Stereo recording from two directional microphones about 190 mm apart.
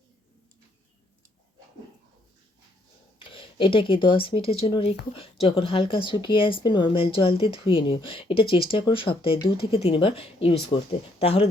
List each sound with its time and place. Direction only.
3.2 s a woman's voice: 25° left (ahead or behind)